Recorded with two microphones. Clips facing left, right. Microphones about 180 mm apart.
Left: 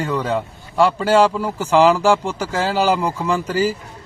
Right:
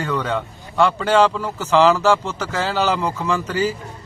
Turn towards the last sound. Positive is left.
turn(degrees=10)  # may be behind; listen again after turning